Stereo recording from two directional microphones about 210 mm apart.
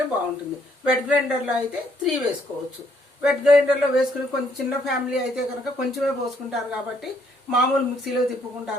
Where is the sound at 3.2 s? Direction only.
5° right (ahead or behind).